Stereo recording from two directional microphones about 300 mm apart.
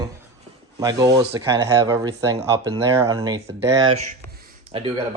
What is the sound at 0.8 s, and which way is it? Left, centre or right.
Speech, centre.